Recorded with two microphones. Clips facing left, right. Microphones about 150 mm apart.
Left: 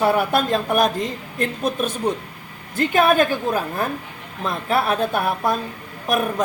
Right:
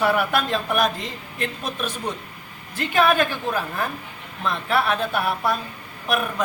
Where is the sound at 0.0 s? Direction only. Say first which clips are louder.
Left 3 dB; 35° left (ahead or behind).